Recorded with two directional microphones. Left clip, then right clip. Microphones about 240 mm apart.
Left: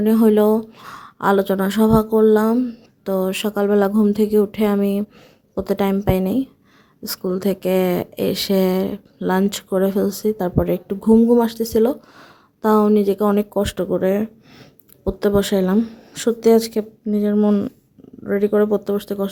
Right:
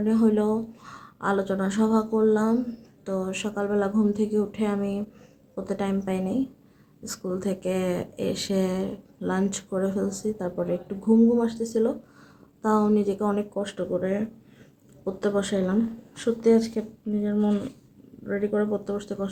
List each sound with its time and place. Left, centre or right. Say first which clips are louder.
0.0 s a woman's voice: left 9 dB; left